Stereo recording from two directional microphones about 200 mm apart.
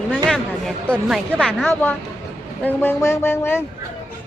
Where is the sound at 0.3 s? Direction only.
Centre (ahead or behind).